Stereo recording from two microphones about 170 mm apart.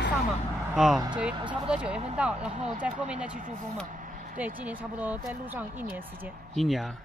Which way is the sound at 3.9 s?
50° right (ahead or behind).